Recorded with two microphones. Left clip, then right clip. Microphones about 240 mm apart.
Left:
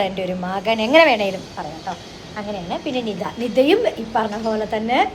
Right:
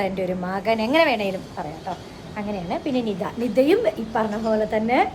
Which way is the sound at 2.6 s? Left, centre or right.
Centre.